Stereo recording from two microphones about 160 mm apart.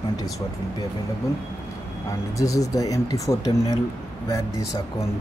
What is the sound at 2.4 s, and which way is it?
Speech, 20° left (ahead or behind).